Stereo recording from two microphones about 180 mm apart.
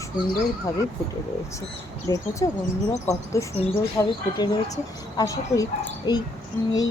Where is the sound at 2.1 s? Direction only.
25° left (ahead or behind).